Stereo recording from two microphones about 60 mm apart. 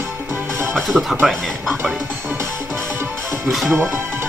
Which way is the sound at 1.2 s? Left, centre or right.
Centre.